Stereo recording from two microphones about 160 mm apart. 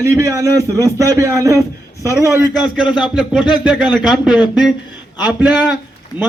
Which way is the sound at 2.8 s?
5° right (ahead or behind).